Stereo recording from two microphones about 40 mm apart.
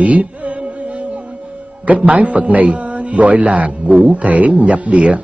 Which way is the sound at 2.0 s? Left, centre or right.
Right.